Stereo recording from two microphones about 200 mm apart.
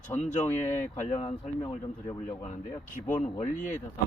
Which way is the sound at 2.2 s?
35° left (ahead or behind).